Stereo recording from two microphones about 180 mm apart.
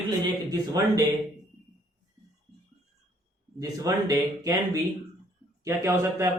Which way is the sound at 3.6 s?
20° right (ahead or behind).